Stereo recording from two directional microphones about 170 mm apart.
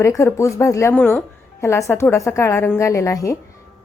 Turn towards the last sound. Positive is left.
turn(degrees=15)  # may be behind; listen again after turning